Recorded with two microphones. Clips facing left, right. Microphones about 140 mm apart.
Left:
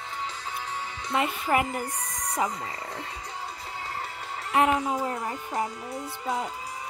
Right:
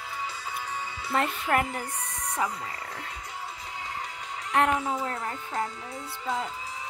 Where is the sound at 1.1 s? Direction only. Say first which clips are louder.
Left 1 dB; 5° left (ahead or behind).